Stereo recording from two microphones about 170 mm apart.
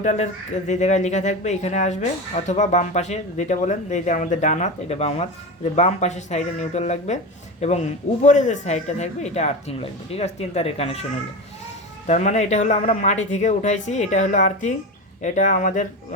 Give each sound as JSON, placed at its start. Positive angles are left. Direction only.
{"t": 0.0, "sound": "speech", "side_deg": 45}
{"t": 12.0, "sound": "speech", "side_deg": 45}